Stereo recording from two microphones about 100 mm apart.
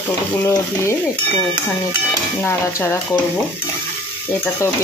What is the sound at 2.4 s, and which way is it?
Stir, 25° left (ahead or behind).